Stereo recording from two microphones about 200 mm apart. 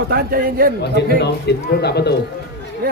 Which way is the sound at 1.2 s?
55° left (ahead or behind).